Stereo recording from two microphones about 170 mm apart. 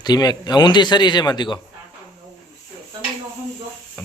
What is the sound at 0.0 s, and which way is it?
Speech, 25° left (ahead or behind).